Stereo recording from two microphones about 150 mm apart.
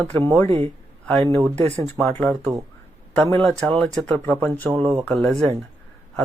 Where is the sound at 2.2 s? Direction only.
10° left (ahead or behind).